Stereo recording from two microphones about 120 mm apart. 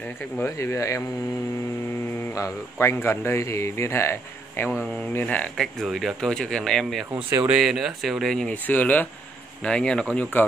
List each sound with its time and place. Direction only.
0.4 s a man's voice: 25° left (ahead or behind)
2.3 s a man's voice: 25° left (ahead or behind); by 10.2 s 5° left (ahead or behind)